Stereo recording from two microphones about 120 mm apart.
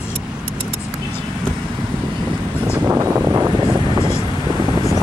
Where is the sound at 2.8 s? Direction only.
25° right (ahead or behind).